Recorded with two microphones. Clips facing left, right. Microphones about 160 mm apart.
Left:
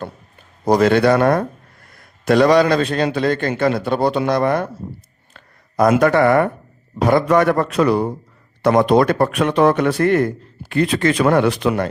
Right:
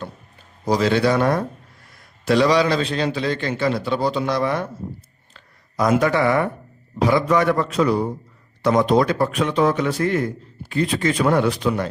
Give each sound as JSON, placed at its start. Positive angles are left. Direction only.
{"t": 0.6, "sound": "a man's voice", "side_deg": 55}
{"t": 5.3, "sound": "a sound", "side_deg": 55}
{"t": 6.0, "sound": "a man's voice", "side_deg": 55}